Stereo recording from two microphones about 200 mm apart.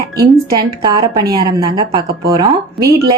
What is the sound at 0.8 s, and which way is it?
A woman's voice, 20° right (ahead or behind).